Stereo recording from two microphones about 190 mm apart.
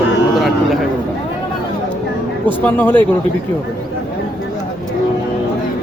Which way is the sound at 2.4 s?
10° left (ahead or behind).